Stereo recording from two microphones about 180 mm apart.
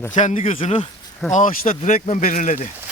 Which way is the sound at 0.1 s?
40° left (ahead or behind).